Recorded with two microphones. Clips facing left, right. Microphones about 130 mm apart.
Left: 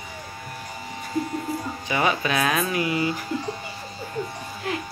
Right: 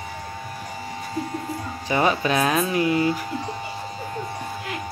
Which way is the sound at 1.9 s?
35° right (ahead or behind).